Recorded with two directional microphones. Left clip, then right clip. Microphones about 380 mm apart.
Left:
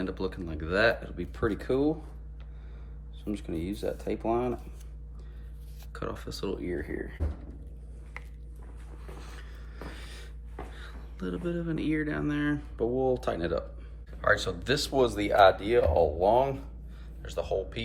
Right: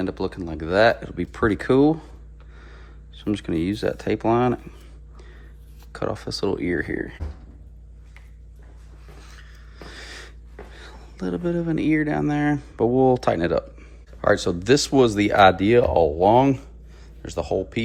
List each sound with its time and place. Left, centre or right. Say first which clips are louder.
0.0 s speech: right 7 dB; centre
3.2 s speech: right 10 dB; right
5.9 s speech: right 10 dB; centre
9.2 s a sound: right 2 dB; centre
9.9 s a sound: right 9 dB; centre
10.8 s speech: right 7 dB; centre